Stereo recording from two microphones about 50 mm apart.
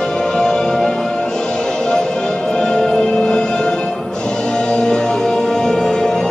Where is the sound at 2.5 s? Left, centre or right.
Centre.